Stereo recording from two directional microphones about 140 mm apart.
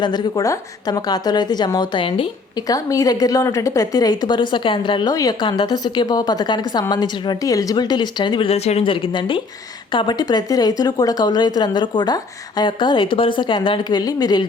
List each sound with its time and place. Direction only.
0.0 s a woman's voice: 30° left (ahead or behind)
2.6 s a woman's voice: 25° left (ahead or behind)